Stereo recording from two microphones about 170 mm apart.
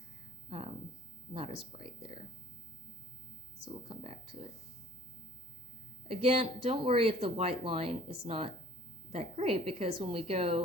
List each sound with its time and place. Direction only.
1.3 s speech: 35° right (ahead or behind)
3.8 s speech: 35° right (ahead or behind)
6.1 s speech: 35° right (ahead or behind)